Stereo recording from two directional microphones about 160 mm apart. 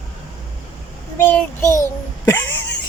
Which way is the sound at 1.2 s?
10° left (ahead or behind).